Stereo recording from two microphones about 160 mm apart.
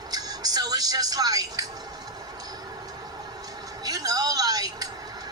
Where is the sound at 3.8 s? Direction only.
25° right (ahead or behind).